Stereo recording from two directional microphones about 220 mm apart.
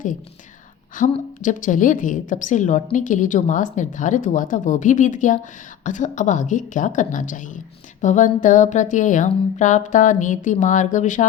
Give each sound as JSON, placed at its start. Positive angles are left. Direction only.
{"t": 0.9, "sound": "a woman's voice", "side_deg": 35}